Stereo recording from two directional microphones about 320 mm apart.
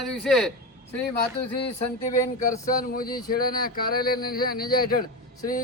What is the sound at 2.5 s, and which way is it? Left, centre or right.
Speech, left.